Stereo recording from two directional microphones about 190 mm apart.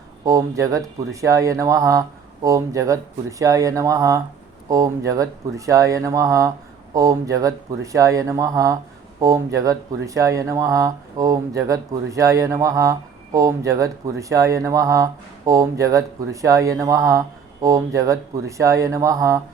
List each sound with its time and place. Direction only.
0.3 s speech: 15° right (ahead or behind)